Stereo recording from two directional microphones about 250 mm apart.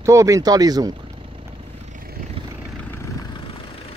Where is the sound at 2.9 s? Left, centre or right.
Centre.